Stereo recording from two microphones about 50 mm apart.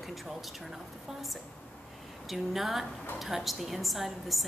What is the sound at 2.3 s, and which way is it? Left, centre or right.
A woman's voice, centre.